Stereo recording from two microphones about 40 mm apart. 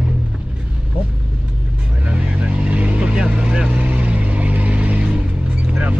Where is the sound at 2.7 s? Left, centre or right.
Right.